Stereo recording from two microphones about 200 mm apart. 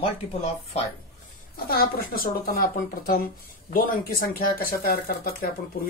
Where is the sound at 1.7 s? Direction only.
45° left (ahead or behind).